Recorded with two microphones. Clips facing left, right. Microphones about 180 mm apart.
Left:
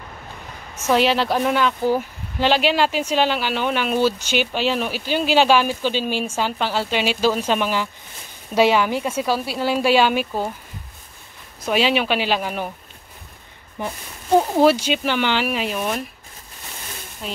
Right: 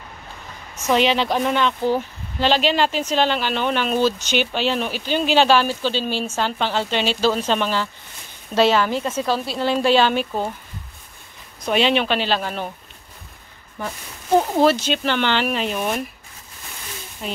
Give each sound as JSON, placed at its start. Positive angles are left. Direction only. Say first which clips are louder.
{"t": 0.8, "sound": "speech", "louder": "even", "side_deg": 5}
{"t": 11.6, "sound": "speech", "louder": "right 1 dB", "side_deg": 5}
{"t": 13.8, "sound": "speech", "louder": "left 1 dB", "side_deg": 20}
{"t": 14.4, "sound": "speech", "louder": "left 1 dB", "side_deg": 10}